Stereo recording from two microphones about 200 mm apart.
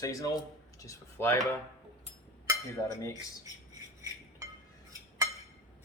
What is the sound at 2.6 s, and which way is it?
Speech, 15° left (ahead or behind).